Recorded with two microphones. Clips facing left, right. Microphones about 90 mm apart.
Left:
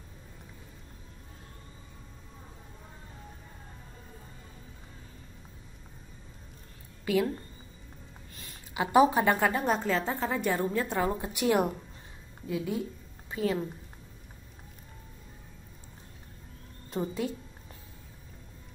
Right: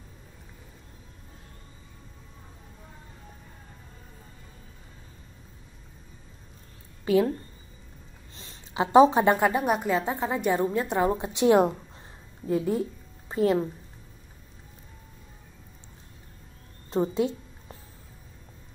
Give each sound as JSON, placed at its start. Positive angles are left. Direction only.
{"t": 7.1, "sound": "speech", "side_deg": -25}
{"t": 8.4, "sound": "a woman's voice", "side_deg": -25}
{"t": 12.4, "sound": "a woman's voice", "side_deg": -40}
{"t": 16.9, "sound": "a sound", "side_deg": -30}